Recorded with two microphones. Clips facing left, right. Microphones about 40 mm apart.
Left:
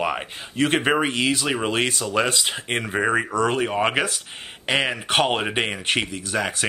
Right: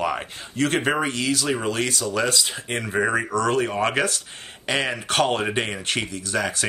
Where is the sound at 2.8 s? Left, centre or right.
Left.